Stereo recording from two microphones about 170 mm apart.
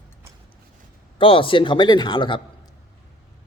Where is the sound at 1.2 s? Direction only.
30° left (ahead or behind).